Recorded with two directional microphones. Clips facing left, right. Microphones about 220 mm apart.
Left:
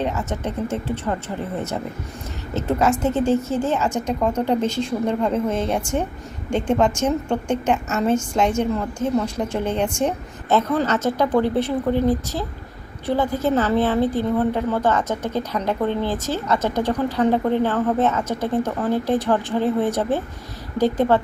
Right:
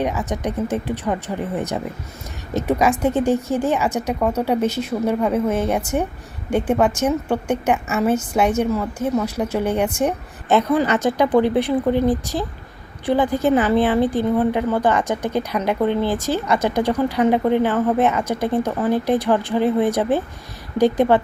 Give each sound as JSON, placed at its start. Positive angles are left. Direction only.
{"t": 0.0, "sound": "speech", "side_deg": -10}